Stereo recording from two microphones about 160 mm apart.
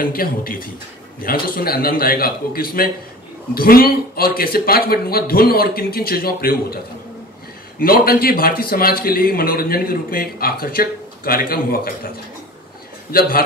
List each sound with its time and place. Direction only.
0.0 s a man's voice: 65° left (ahead or behind)
7.8 s a man's voice: 65° left (ahead or behind)
13.1 s a man's voice: 70° left (ahead or behind)